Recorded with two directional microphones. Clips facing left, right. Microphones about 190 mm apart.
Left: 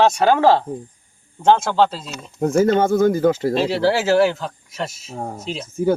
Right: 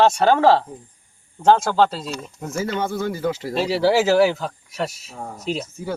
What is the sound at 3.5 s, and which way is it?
Speech, 5° right (ahead or behind).